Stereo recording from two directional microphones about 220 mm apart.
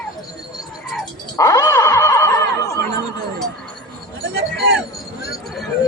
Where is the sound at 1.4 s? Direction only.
15° left (ahead or behind).